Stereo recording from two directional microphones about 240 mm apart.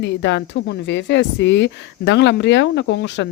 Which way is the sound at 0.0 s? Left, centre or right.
Left.